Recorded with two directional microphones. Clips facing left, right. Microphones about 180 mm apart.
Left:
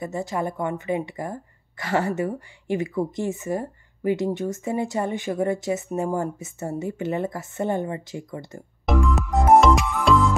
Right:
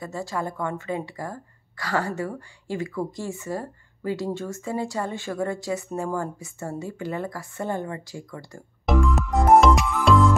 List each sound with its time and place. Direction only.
0.0 s speech: 20° left (ahead or behind)
8.8 s music: centre (ahead or behind)